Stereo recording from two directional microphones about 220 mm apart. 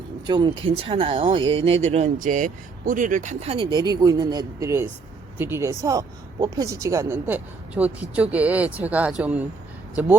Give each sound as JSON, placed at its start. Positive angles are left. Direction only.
{"t": 0.3, "sound": "a woman's voice", "side_deg": -20}